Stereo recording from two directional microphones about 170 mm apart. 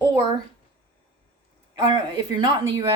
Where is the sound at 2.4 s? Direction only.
20° right (ahead or behind).